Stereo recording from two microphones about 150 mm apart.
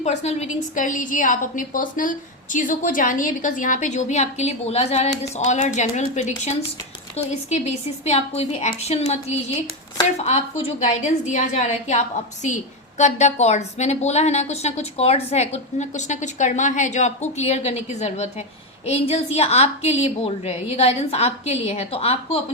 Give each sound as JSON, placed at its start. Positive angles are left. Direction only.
{"t": 0.0, "sound": "a woman's voice", "side_deg": 50}
{"t": 0.8, "sound": "a woman's voice", "side_deg": 60}